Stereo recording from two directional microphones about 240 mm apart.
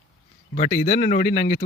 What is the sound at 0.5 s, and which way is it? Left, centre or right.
Speech, left.